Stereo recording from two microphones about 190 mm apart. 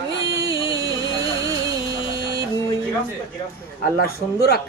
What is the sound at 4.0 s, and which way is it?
Speech, 55° left (ahead or behind).